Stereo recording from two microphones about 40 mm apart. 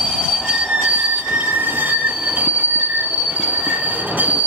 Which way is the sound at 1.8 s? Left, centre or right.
Right.